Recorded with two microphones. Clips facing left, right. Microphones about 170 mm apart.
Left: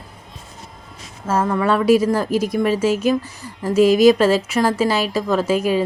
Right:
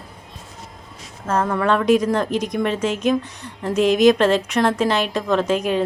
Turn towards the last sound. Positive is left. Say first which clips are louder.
# left 1 dB
turn(degrees=5)  # may be behind; listen again after turning